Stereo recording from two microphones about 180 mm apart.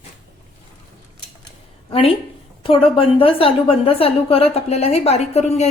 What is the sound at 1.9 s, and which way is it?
A woman's voice, 30° left (ahead or behind).